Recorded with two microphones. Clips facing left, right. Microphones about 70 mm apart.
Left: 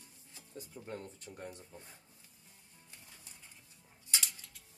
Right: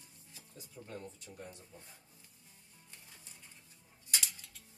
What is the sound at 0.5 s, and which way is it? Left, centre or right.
Speech, left.